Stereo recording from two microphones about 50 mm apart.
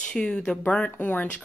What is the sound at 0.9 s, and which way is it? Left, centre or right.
Speech, left.